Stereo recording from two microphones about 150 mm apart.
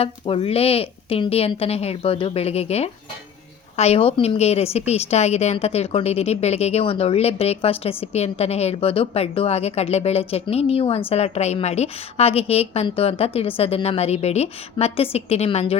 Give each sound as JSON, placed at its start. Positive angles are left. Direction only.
{"t": 0.0, "sound": "a woman's voice", "side_deg": 40}